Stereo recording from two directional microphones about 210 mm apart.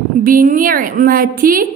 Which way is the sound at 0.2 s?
40° right (ahead or behind).